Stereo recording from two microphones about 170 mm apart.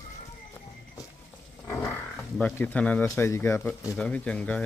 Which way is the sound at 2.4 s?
10° left (ahead or behind).